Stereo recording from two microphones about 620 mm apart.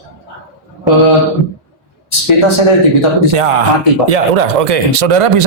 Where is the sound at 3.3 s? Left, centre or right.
Right.